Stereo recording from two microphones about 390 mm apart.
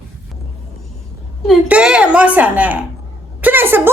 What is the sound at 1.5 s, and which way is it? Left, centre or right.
Speech, centre.